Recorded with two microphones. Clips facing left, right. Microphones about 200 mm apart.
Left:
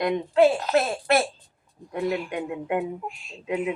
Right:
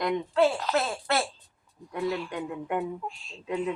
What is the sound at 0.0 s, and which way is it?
Speech, 20° left (ahead or behind).